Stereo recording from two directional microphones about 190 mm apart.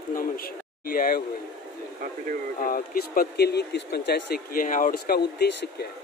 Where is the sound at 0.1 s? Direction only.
50° left (ahead or behind).